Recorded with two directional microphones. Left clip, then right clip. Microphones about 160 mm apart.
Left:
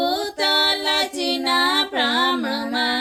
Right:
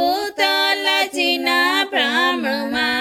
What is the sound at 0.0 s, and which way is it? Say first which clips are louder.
Music: right 3 dB; 35° right (ahead or behind).